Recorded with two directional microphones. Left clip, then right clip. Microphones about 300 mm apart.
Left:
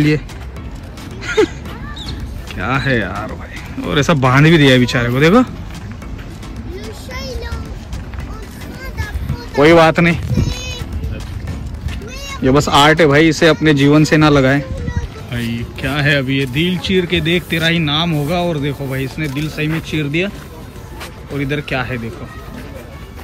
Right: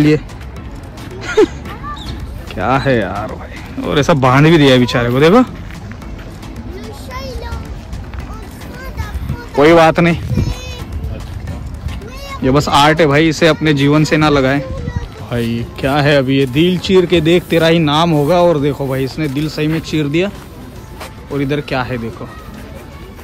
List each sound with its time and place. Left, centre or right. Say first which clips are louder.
1.2 s a sound: right 3 dB; centre
3.8 s speech: right 2 dB; centre
7.1 s music: right 1 dB; centre
9.6 s speech: right 1 dB; centre
10.4 s music: left 2 dB; right
12.4 s speech: even; centre
15.2 s speech: right 5 dB; centre
21.4 s speech: right 2 dB; centre